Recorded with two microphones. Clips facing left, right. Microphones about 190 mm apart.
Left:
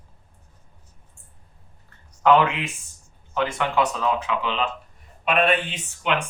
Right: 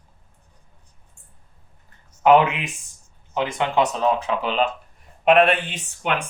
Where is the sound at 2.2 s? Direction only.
20° right (ahead or behind).